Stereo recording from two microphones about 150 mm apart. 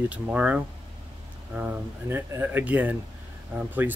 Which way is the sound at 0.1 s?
10° right (ahead or behind).